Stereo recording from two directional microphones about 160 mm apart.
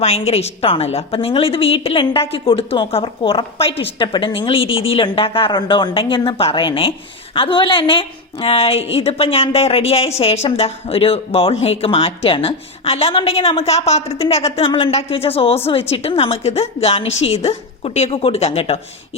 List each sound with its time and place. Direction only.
0.0 s speech: 40° left (ahead or behind)